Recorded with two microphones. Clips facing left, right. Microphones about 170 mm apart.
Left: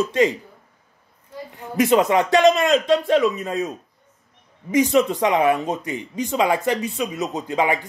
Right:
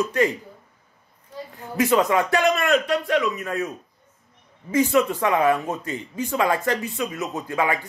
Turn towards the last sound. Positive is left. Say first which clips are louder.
# left 3 dB
turn(degrees=20)  # may be behind; listen again after turning